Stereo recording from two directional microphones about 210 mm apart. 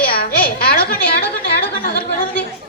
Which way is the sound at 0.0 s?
45° left (ahead or behind).